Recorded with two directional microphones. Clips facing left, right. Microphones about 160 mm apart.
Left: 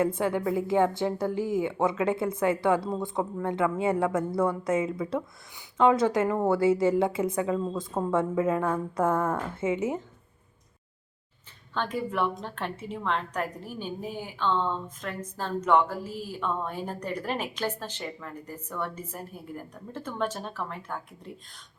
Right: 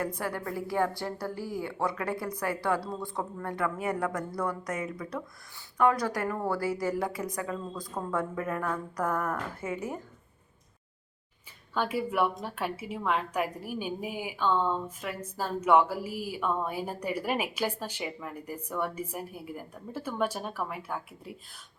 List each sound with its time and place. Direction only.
0.0 s speech: 25° left (ahead or behind)
11.7 s a woman's voice: 10° right (ahead or behind)